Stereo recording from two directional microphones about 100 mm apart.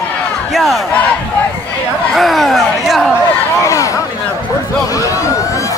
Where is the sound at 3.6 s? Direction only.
35° left (ahead or behind).